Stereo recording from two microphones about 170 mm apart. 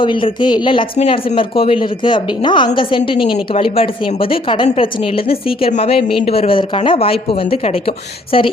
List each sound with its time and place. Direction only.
0.0 s a woman's voice: 30° left (ahead or behind)